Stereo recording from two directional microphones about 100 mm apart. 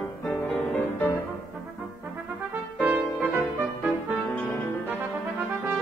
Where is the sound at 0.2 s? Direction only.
15° left (ahead or behind).